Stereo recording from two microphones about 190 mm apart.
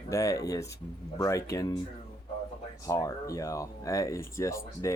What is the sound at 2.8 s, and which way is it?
Speech, 15° left (ahead or behind).